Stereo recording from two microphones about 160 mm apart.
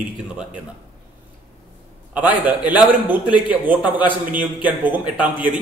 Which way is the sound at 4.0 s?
30° left (ahead or behind).